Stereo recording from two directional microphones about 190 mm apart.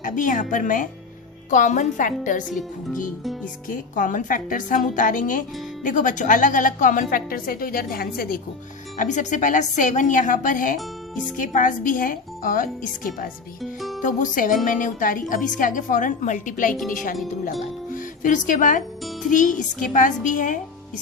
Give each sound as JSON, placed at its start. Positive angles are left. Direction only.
{"t": 0.0, "sound": "a woman's voice", "side_deg": 45}
{"t": 3.4, "sound": "a woman's voice", "side_deg": 45}
{"t": 9.0, "sound": "a woman's voice", "side_deg": 40}
{"t": 13.6, "sound": "speech", "side_deg": 0}
{"t": 14.0, "sound": "a woman's voice", "side_deg": 40}